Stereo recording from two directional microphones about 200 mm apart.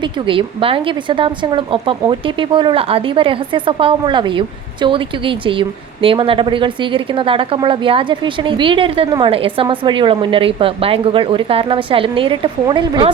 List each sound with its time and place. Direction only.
0.0 s a woman's voice: 25° right (ahead or behind)